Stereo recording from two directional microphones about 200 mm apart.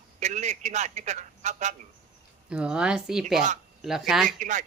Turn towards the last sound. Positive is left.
turn(degrees=-40)  # may be behind; listen again after turning